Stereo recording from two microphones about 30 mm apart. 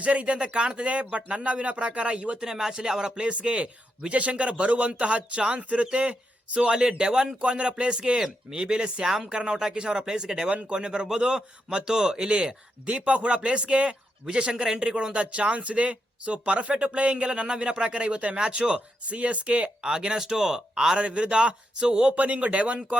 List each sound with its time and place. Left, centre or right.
0.0 s a man's voice: right
2.3 s speech: right
3.4 s a man's voice: right
6.7 s speech: right
7.6 s a man's voice: right
15.1 s a man's voice: right
19.0 s speech: right
19.8 s speech: right
20.1 s speech: centre
20.9 s a man's voice: right
21.8 s speech: right
22.1 s speech: right